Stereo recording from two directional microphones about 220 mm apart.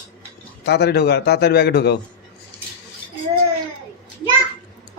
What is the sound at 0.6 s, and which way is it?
A man's voice, 50° left (ahead or behind).